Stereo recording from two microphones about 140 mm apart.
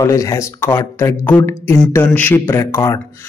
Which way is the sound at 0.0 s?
20° left (ahead or behind).